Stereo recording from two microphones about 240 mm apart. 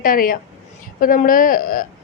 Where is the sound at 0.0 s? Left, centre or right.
Left.